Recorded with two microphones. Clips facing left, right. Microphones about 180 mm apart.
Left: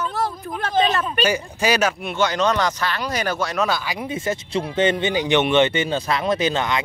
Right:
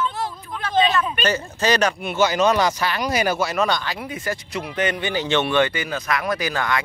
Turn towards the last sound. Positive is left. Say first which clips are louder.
# left 3 dB
turn(degrees=20)  # may be behind; listen again after turning